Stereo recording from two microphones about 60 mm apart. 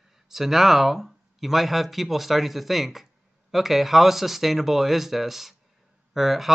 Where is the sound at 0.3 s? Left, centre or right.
Centre.